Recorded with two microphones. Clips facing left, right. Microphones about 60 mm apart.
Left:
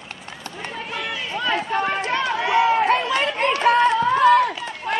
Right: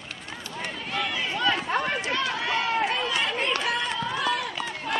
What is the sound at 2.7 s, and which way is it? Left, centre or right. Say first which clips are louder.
Chatter: left 7 dB; left.